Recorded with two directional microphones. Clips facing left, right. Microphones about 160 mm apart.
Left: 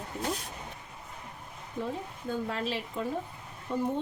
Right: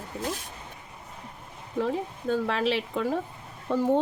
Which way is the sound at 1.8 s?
90° right.